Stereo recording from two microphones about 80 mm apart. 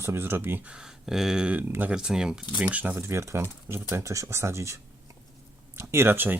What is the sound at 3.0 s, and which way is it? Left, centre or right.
Speech, right.